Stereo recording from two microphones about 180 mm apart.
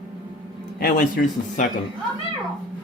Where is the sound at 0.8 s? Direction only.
55° left (ahead or behind).